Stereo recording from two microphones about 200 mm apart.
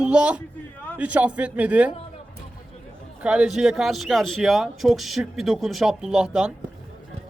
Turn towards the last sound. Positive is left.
turn(degrees=-5)  # may be behind; listen again after turning